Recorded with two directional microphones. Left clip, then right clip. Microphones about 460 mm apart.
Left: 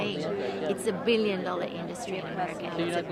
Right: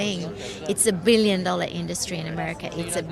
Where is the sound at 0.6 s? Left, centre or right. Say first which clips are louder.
Right 8 dB; right.